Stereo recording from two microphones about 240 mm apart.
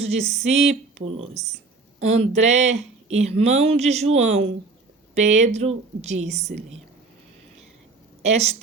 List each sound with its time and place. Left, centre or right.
0.0 s speech: right
0.3 s speech: centre
0.5 s speech: right
8.2 s speech: right